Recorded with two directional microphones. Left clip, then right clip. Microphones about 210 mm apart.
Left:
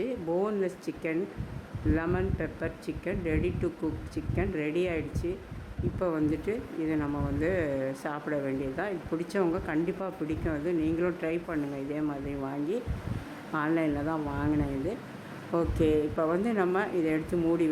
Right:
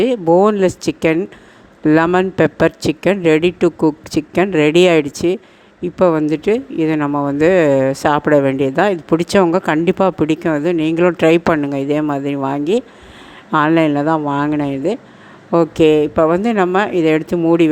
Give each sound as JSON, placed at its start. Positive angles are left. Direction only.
{"t": 0.0, "sound": "speech", "side_deg": -45}